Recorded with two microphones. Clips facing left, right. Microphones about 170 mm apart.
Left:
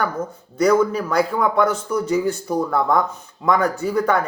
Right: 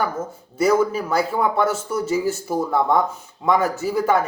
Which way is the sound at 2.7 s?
25° right (ahead or behind).